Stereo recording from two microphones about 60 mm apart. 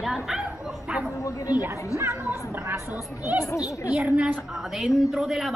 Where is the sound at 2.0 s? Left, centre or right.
Right.